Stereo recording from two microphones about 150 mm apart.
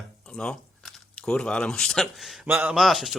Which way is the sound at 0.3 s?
5° left (ahead or behind).